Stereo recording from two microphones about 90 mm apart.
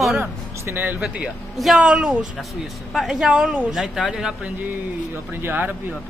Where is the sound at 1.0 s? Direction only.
10° right (ahead or behind).